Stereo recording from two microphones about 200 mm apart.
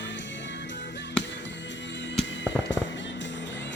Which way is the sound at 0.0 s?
65° left (ahead or behind).